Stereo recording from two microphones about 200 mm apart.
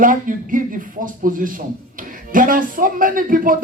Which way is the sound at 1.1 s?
45° right (ahead or behind).